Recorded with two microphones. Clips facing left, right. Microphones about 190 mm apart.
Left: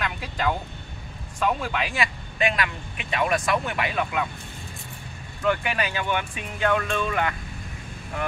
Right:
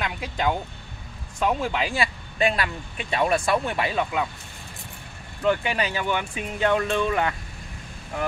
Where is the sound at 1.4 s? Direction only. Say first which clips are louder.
Right 1 dB; 30° right (ahead or behind).